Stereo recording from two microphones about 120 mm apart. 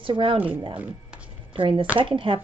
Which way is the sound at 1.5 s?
45° right (ahead or behind).